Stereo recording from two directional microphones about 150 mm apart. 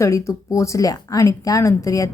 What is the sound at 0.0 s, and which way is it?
Speech, 20° left (ahead or behind).